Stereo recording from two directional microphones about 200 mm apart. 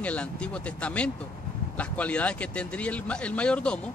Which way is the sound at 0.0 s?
5° left (ahead or behind).